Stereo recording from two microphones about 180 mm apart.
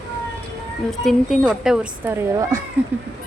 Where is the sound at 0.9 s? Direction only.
Centre (ahead or behind); by 2.6 s 15° right (ahead or behind).